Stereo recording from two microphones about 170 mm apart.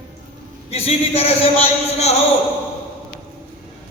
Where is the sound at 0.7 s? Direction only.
35° left (ahead or behind).